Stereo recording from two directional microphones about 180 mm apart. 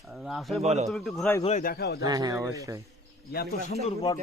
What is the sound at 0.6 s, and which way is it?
Speech, 40° right (ahead or behind).